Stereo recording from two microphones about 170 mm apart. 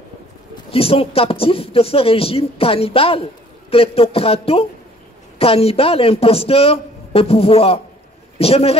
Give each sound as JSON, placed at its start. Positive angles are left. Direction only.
{"t": 0.7, "sound": "speech", "side_deg": 35}